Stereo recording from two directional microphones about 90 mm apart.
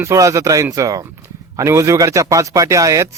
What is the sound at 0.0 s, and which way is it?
A man's voice, 35° right (ahead or behind).